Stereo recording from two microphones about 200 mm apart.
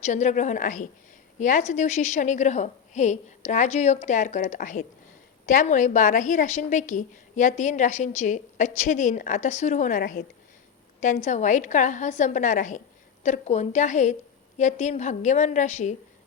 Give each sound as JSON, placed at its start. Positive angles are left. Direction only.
{"t": 0.0, "sound": "a woman's voice", "side_deg": 35}